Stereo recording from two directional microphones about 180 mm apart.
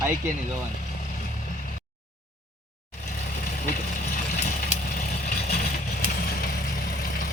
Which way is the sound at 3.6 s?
45° left (ahead or behind).